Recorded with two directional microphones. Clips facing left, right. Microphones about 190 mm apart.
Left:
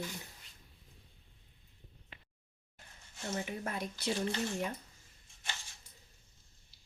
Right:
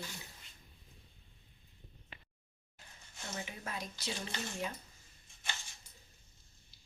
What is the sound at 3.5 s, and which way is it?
Speech, 55° left (ahead or behind).